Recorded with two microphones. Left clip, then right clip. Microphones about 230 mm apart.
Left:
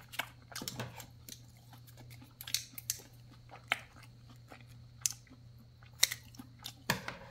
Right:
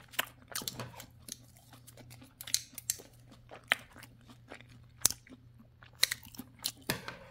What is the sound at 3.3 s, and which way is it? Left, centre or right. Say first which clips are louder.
Biting: right 4 dB; right.